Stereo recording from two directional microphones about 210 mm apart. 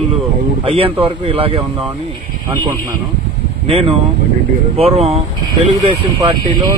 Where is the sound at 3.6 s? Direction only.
25° right (ahead or behind).